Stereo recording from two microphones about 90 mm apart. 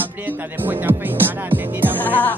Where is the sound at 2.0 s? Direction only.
20° left (ahead or behind).